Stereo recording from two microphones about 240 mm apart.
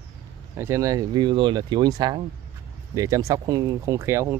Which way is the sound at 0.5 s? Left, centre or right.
Centre.